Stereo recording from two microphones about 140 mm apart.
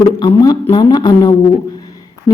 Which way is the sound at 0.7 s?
30° left (ahead or behind).